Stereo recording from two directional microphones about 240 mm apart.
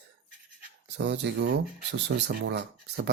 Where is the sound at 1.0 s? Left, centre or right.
Right.